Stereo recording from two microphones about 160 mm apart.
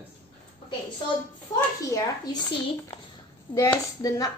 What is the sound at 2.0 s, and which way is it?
Speech, 25° left (ahead or behind).